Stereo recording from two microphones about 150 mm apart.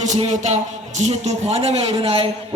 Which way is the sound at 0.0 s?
50° right (ahead or behind).